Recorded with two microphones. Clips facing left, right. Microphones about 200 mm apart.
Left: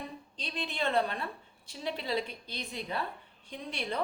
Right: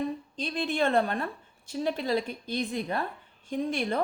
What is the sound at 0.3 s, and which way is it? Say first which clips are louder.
A woman's voice: right 7 dB; 50° right (ahead or behind).